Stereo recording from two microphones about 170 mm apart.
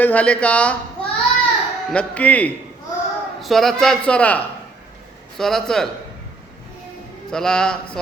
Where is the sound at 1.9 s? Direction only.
10° left (ahead or behind).